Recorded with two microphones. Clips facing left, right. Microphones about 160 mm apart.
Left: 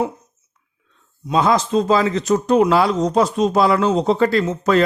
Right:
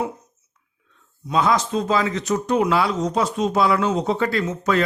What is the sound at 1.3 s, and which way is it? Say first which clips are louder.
A man's voice: left 3 dB; 30° left (ahead or behind).